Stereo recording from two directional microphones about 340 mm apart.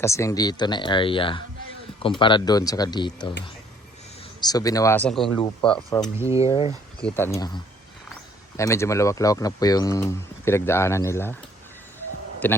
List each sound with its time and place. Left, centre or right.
0.0 s speech: centre
4.4 s speech: centre
6.5 s speech: centre
12.4 s speech: centre